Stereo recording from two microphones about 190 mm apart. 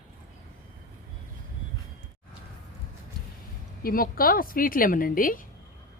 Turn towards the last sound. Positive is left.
turn(degrees=45)  # may be behind; listen again after turning